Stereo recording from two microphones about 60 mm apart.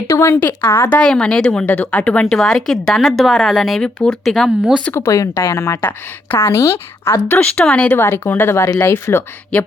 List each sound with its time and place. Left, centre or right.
0.1 s a woman's voice: left
0.3 s speech: left
0.9 s speech: centre
1.5 s speech: left
2.3 s speech: centre
4.4 s speech: centre
4.9 s a woman's voice: left
7.5 s speech: centre
7.9 s a woman's voice: left
9.5 s speech: centre